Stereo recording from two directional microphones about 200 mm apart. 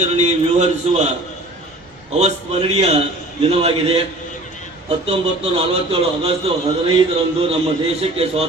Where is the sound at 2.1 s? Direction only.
35° right (ahead or behind).